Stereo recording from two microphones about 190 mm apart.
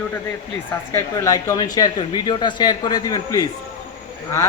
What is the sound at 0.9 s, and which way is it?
Speech, 15° left (ahead or behind).